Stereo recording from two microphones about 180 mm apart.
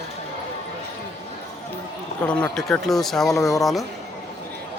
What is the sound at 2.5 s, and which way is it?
Speech, centre (ahead or behind).